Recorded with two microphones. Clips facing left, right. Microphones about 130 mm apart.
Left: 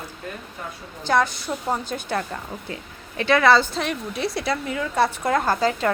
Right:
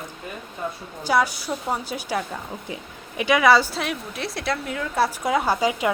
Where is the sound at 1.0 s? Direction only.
10° right (ahead or behind).